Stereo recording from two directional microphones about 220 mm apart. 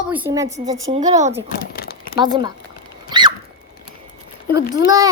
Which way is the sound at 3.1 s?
20° right (ahead or behind).